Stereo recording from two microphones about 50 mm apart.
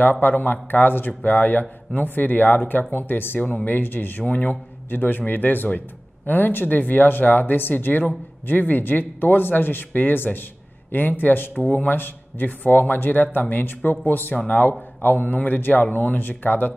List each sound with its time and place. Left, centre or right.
0.0 s a man's voice: left
4.2 s a man's voice: left